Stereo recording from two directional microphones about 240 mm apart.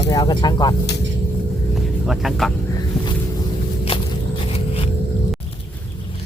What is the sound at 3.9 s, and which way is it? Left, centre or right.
Walk, left.